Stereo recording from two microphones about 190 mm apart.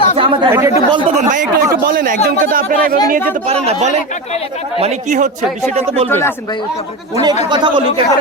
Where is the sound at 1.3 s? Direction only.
45° right (ahead or behind).